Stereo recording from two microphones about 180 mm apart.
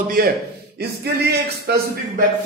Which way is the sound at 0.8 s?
65° right (ahead or behind).